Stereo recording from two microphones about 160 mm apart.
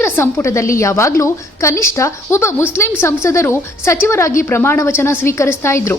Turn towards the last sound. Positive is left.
turn(degrees=15)  # may be behind; listen again after turning